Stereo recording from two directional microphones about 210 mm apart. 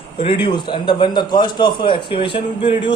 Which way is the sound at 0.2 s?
25° left (ahead or behind).